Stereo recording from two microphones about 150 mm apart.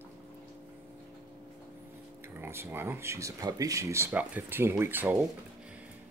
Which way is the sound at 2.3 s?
15° right (ahead or behind).